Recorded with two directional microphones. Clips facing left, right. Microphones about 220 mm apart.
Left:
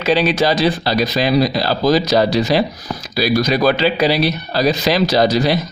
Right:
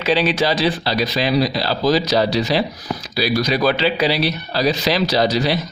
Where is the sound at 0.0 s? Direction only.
45° left (ahead or behind).